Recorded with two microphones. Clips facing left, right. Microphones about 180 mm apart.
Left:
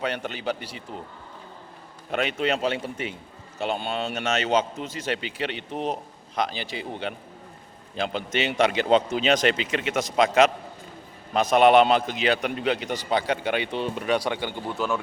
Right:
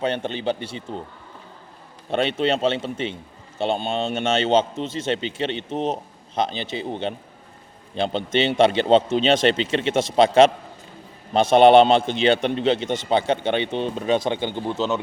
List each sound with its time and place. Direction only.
0.0 s a man's voice: 25° right (ahead or behind)
2.0 s a man's voice: 30° right (ahead or behind)